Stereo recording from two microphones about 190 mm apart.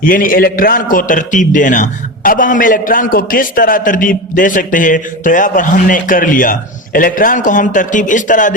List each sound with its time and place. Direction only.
0.0 s a man's voice: 45° left (ahead or behind)